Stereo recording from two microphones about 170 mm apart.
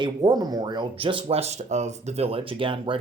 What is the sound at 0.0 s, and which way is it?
Speech, 25° right (ahead or behind).